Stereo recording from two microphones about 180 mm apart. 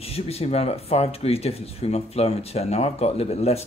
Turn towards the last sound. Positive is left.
turn(degrees=35)  # may be behind; listen again after turning